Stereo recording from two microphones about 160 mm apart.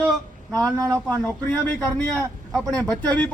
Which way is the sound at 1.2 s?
10° left (ahead or behind).